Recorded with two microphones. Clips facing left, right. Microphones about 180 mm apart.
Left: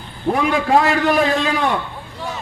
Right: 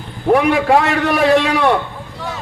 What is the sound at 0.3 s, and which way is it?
A man's voice, 65° right (ahead or behind).